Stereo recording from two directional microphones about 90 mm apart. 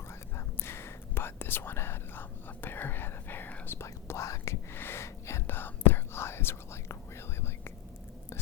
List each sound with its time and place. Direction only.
0.3 s whispering: 25° left (ahead or behind)